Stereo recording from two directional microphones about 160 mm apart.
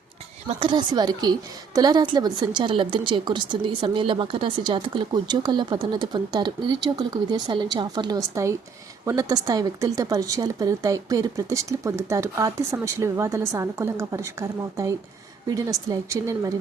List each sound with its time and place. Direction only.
0.6 s a woman's voice: 30° right (ahead or behind)